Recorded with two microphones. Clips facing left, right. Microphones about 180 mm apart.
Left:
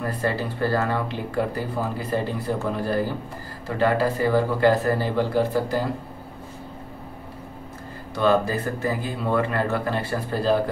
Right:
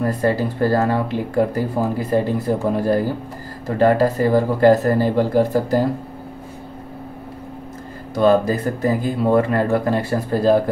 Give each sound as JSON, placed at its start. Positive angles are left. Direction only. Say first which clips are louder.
{"t": 0.0, "sound": "speech", "louder": "right 7 dB", "side_deg": -45}
{"t": 8.1, "sound": "speech", "louder": "right 5 dB", "side_deg": -40}